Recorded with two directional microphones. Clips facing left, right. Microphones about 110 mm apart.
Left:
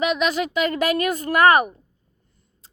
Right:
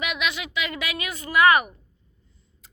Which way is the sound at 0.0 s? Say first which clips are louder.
Left 8 dB; 35° left (ahead or behind).